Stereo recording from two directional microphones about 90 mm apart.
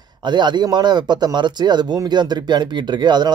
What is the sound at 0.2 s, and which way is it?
Speech, 55° right (ahead or behind).